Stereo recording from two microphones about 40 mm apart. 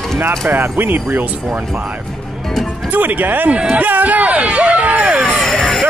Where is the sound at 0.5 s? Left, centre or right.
Right.